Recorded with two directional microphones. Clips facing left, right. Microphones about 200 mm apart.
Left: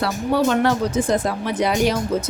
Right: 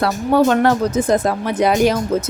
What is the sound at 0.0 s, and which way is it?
Speech, 50° right (ahead or behind).